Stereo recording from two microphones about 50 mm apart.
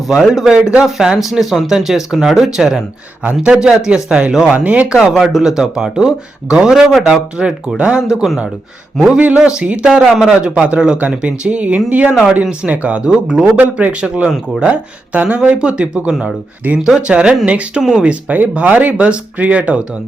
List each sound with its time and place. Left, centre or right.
0.1 s speech: centre
0.5 s speech: right
0.8 s speech: centre
4.5 s speech: right
5.1 s speech: centre
10.2 s speech: right
14.7 s speech: right
15.4 s speech: centre
17.7 s speech: centre
18.1 s speech: right